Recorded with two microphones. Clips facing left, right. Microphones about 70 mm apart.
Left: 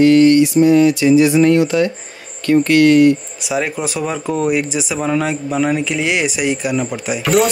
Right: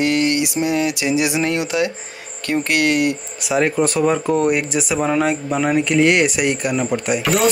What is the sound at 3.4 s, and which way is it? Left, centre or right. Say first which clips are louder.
Speech: right 3 dB; centre.